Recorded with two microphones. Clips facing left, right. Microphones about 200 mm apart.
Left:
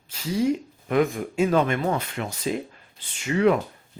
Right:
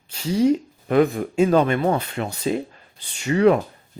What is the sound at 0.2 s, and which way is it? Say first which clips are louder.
Speech: right 5 dB; 30° right (ahead or behind).